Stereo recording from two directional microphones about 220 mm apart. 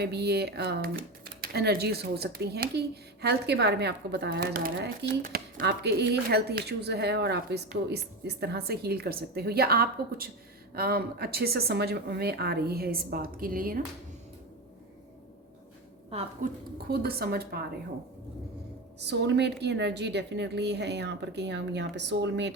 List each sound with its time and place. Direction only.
0.0 s speech: 45° right (ahead or behind)
16.0 s speech: 25° right (ahead or behind)
16.9 s speech: 45° right (ahead or behind)
18.9 s speech: 50° right (ahead or behind)